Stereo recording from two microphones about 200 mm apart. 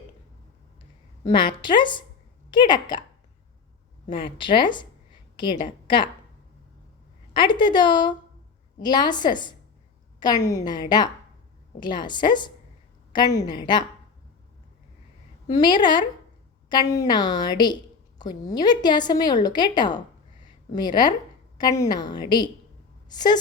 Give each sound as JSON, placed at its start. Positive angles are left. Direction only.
{"t": 0.8, "sound": "a woman's voice", "side_deg": 20}
{"t": 4.0, "sound": "a woman's voice", "side_deg": 25}
{"t": 7.3, "sound": "a woman's voice", "side_deg": 25}
{"t": 15.4, "sound": "a woman's voice", "side_deg": 20}